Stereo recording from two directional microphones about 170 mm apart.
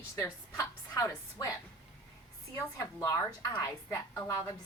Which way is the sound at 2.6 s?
20° left (ahead or behind).